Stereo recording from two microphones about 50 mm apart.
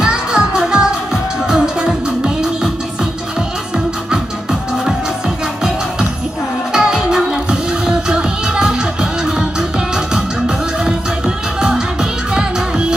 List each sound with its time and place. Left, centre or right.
0.0 s music: centre
3.7 s music: centre
6.7 s music: centre